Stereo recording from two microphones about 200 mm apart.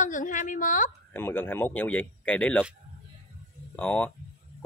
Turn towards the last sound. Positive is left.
turn(degrees=5)  # may be behind; listen again after turning